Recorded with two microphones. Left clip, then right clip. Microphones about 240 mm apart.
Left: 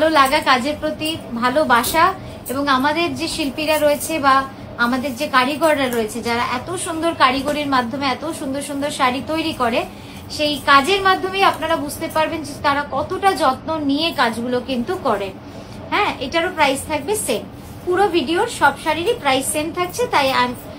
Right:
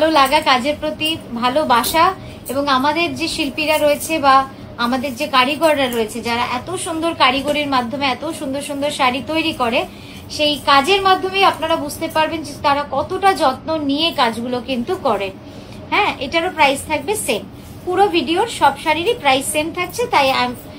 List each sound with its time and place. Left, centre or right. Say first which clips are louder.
0.0 s a woman's voice: right 1 dB; right